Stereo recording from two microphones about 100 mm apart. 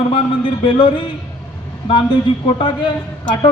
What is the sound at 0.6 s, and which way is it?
Speech, 60° left (ahead or behind).